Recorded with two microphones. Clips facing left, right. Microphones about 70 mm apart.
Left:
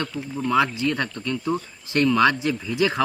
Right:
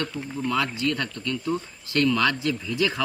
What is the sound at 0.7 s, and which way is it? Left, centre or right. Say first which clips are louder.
Speech: left 2 dB; left.